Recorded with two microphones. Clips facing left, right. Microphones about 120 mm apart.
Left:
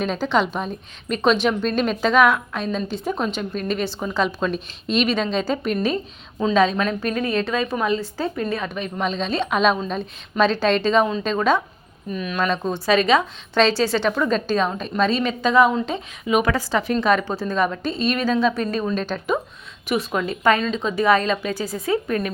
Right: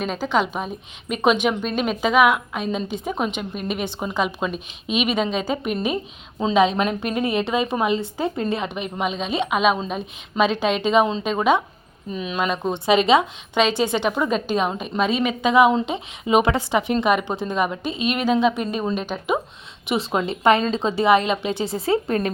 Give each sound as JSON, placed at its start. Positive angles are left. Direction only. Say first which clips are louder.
{"t": 0.0, "sound": "a woman's voice", "louder": "left 1 dB", "side_deg": -5}
{"t": 19.9, "sound": "a woman's voice", "louder": "even", "side_deg": -25}